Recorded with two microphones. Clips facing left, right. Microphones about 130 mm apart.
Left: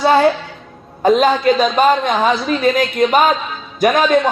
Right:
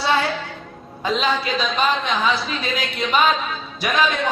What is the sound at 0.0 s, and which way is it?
A woman's voice, 45° left (ahead or behind).